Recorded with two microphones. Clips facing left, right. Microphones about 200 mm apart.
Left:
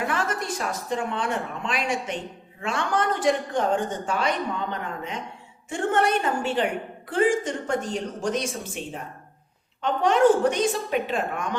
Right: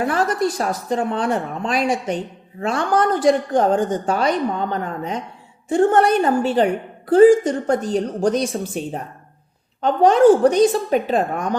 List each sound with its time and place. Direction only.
0.0 s a woman's voice: 35° right (ahead or behind)